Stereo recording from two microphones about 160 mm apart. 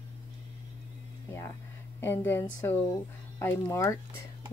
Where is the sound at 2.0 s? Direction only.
15° left (ahead or behind).